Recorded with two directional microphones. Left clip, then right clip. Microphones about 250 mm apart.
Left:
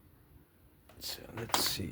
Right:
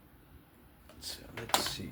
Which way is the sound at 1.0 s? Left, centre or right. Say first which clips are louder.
Left 1 dB; left.